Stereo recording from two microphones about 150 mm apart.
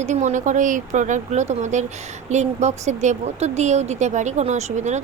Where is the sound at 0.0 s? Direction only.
50° right (ahead or behind).